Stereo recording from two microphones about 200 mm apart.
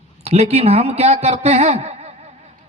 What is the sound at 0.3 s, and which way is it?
A man's voice, 30° right (ahead or behind).